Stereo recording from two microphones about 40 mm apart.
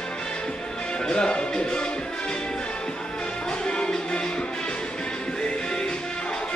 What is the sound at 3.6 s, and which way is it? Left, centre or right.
Music, left.